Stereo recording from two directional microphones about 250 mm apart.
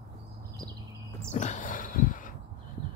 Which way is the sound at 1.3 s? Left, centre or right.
Left.